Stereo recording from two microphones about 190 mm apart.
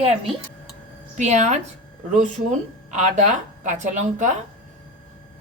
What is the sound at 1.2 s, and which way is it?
A woman's voice, 35° right (ahead or behind).